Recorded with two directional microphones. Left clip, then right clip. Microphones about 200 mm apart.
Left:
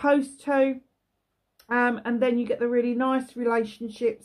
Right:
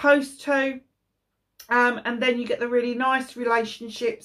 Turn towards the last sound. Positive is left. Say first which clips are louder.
# even
turn(degrees=50)  # may be behind; listen again after turning